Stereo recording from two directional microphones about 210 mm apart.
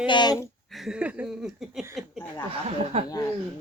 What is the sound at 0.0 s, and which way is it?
Speech, 20° left (ahead or behind).